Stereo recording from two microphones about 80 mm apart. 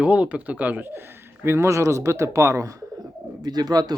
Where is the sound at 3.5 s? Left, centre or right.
Right.